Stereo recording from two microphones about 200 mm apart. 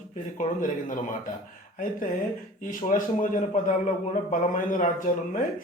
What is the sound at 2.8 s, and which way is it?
Speech, 40° left (ahead or behind).